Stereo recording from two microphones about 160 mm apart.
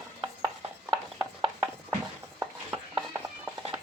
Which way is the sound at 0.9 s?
30° right (ahead or behind).